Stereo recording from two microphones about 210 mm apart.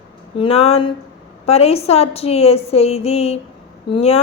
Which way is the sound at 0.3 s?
30° left (ahead or behind).